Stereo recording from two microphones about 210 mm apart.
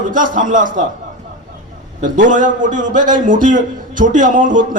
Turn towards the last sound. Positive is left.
turn(degrees=-40)  # may be behind; listen again after turning